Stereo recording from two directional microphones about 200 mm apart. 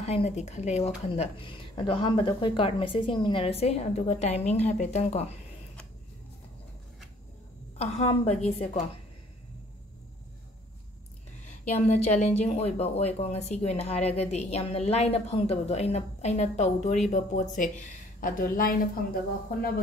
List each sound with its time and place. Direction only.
0.0 s speech: 30° left (ahead or behind)
7.8 s speech: 30° left (ahead or behind)
11.4 s speech: 35° left (ahead or behind)